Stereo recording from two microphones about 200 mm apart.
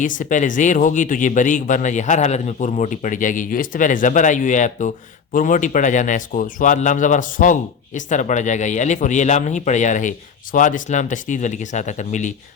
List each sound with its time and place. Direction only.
0.0 s a man's voice: 40° left (ahead or behind)